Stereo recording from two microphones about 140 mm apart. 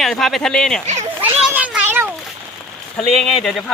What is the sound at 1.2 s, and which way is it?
Cat, 10° right (ahead or behind).